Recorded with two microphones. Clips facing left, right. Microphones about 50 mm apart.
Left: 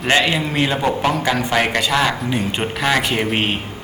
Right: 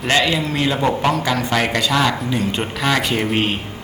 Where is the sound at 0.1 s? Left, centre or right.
Left.